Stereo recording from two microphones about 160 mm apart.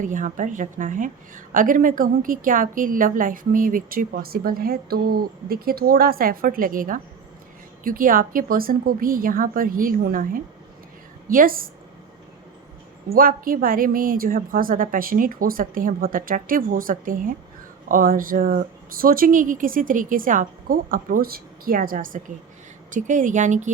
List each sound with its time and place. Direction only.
0.0 s a woman's voice: 55° right (ahead or behind)
11.3 s a woman's voice: 60° right (ahead or behind)
13.1 s a woman's voice: 65° right (ahead or behind)